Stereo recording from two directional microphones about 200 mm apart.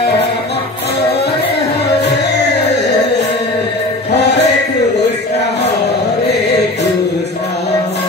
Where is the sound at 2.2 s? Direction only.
60° left (ahead or behind).